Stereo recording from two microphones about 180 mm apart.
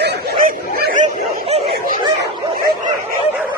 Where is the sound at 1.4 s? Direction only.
35° right (ahead or behind).